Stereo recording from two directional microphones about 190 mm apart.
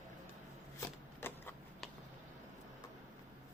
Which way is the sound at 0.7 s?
10° left (ahead or behind).